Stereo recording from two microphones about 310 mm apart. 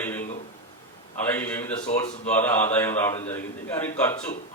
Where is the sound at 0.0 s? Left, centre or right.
Centre.